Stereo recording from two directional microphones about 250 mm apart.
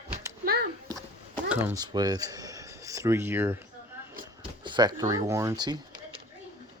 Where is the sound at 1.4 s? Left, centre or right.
Centre.